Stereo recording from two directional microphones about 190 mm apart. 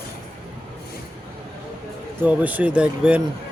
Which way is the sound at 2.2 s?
10° right (ahead or behind).